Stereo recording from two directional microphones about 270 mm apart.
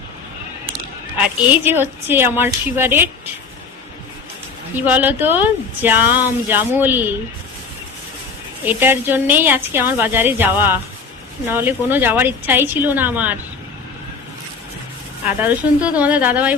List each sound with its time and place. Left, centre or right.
1.5 s speech: centre
4.8 s speech: centre
8.6 s speech: centre
15.3 s a woman's voice: centre